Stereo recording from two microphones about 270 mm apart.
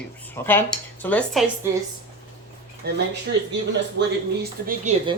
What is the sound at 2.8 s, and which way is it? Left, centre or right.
Speech, right.